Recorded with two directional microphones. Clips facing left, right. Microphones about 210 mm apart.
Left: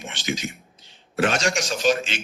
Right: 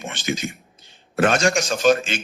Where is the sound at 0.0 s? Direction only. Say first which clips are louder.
Right 3 dB; 50° right (ahead or behind).